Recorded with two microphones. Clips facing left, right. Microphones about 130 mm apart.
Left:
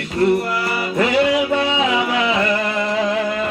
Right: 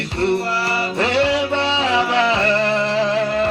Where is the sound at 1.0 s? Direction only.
30° right (ahead or behind).